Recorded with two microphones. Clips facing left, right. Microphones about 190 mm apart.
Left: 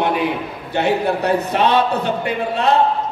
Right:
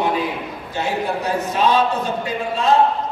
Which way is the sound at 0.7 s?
65° left (ahead or behind).